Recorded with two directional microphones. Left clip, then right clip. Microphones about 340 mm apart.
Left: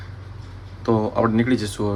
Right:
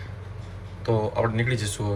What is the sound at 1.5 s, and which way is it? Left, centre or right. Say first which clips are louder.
Speech: left 6 dB; left.